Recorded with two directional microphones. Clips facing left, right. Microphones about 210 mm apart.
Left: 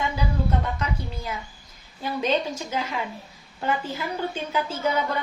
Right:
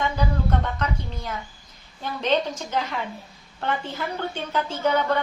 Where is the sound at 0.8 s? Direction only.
10° left (ahead or behind).